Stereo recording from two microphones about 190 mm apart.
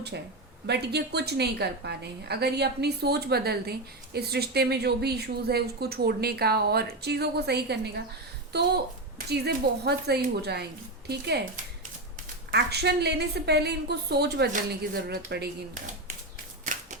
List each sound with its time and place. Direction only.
0.7 s a woman's voice: 60° right (ahead or behind)
12.5 s a woman's voice: 60° right (ahead or behind)